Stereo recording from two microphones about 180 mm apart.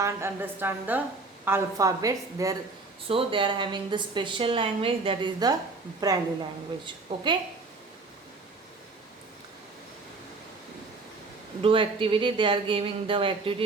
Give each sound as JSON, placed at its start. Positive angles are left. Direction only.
{"t": 0.0, "sound": "a woman's voice", "side_deg": -15}
{"t": 3.1, "sound": "a woman's voice", "side_deg": -30}
{"t": 7.1, "sound": "a woman's voice", "side_deg": -30}
{"t": 11.6, "sound": "a woman's voice", "side_deg": -30}